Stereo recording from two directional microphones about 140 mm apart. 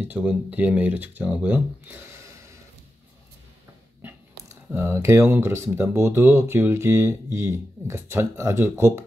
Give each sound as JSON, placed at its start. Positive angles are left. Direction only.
{"t": 0.0, "sound": "speech", "side_deg": -10}
{"t": 4.6, "sound": "speech", "side_deg": -15}